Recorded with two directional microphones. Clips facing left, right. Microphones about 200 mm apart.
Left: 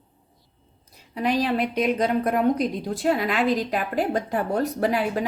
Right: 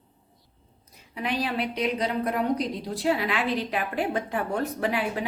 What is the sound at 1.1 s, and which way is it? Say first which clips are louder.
A woman's voice: left 5 dB; 40° left (ahead or behind).